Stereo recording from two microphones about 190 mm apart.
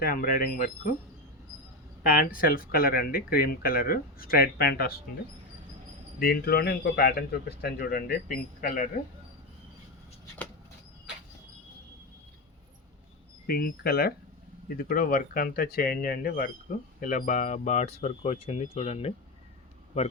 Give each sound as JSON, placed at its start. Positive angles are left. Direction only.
{"t": 0.0, "sound": "speech", "side_deg": 50}
{"t": 2.0, "sound": "speech", "side_deg": 50}
{"t": 6.1, "sound": "speech", "side_deg": 50}
{"t": 13.5, "sound": "speech", "side_deg": 55}